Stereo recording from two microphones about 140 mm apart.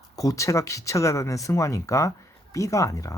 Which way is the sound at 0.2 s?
25° left (ahead or behind).